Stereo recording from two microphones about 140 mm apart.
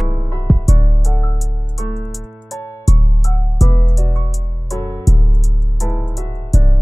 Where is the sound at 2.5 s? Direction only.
Centre (ahead or behind).